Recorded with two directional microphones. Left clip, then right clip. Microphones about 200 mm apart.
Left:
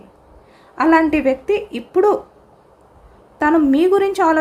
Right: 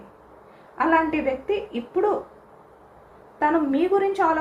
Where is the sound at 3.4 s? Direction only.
65° left (ahead or behind).